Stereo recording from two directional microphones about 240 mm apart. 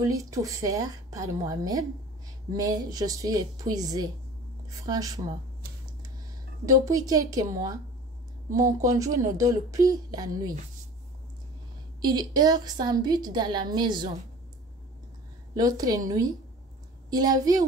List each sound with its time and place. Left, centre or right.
0.0 s a woman's voice: centre
6.6 s a woman's voice: centre
12.0 s a woman's voice: centre
15.5 s a woman's voice: centre
17.1 s a woman's voice: centre